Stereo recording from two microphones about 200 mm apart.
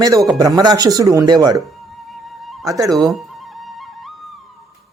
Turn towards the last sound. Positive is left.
turn(degrees=0)  # may be behind; listen again after turning